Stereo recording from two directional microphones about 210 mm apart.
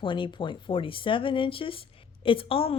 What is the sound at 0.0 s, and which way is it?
A woman's voice, 25° left (ahead or behind).